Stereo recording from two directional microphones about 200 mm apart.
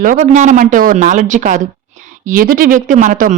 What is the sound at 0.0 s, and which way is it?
Speech, 40° right (ahead or behind).